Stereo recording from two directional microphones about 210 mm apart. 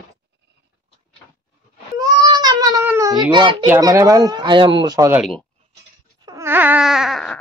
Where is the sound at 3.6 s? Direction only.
15° right (ahead or behind).